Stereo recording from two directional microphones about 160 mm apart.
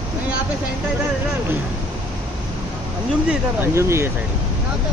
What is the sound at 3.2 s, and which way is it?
Speech, 15° right (ahead or behind).